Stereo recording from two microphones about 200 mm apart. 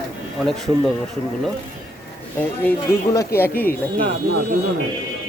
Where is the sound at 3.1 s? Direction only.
10° left (ahead or behind).